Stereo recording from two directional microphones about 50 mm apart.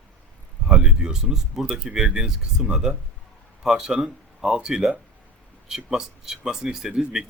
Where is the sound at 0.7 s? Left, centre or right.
Centre.